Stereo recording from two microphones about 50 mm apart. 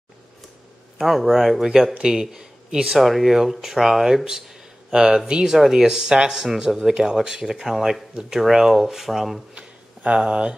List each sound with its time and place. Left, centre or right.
0.9 s speech: centre
3.0 s speech: centre
9.6 s a sound: right